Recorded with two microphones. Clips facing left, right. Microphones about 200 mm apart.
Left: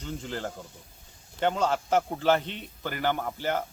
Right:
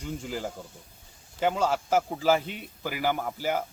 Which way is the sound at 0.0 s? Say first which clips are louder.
Right 1 dB; 10° right (ahead or behind).